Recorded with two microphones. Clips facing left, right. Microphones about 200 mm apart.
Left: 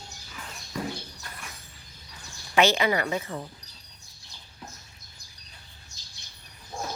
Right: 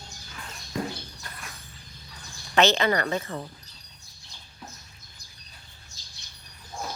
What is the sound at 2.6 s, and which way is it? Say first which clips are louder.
Speech: right 1 dB; 10° left (ahead or behind).